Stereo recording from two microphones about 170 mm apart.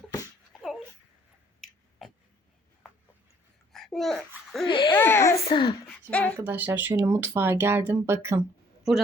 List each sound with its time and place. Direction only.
0.5 s a sound: centre (ahead or behind)
3.7 s babbling: centre (ahead or behind)
4.6 s speech: 30° left (ahead or behind)
4.9 s a sound: 15° left (ahead or behind)
5.5 s speech: 30° left (ahead or behind)
6.1 s speech: 10° left (ahead or behind)
6.3 s speech: 10° right (ahead or behind)